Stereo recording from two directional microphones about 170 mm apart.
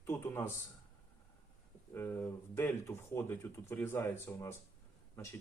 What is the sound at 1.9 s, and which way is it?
Speech, 15° left (ahead or behind).